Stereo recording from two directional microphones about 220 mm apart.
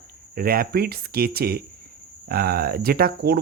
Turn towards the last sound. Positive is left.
turn(degrees=-45)  # may be behind; listen again after turning